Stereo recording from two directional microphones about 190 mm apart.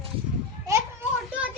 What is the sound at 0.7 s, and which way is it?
Children playing, 20° right (ahead or behind).